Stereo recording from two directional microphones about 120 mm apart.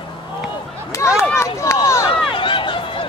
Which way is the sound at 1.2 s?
25° left (ahead or behind).